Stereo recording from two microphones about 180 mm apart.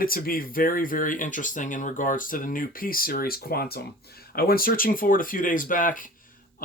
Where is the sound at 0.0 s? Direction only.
55° left (ahead or behind).